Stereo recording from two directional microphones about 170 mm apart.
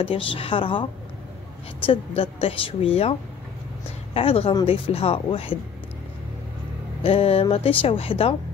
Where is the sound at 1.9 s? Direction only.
30° left (ahead or behind).